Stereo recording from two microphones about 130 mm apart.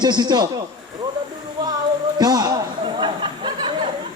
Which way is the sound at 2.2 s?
30° right (ahead or behind).